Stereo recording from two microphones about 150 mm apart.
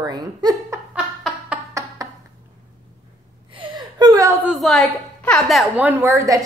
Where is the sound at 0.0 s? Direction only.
25° right (ahead or behind).